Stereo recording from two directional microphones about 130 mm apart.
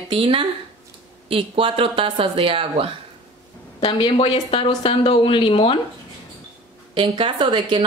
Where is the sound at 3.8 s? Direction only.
40° left (ahead or behind).